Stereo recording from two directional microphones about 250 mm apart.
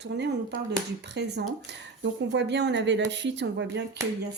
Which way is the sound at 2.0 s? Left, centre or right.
Right.